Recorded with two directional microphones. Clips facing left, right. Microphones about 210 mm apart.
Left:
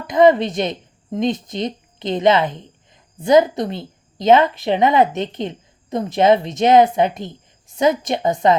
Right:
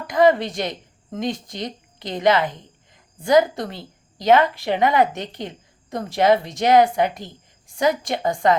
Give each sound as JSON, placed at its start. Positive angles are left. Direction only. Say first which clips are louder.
{"t": 0.1, "sound": "a woman's voice", "louder": "left 4 dB", "side_deg": 20}